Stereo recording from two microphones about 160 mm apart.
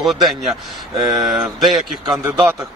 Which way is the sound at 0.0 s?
Centre (ahead or behind).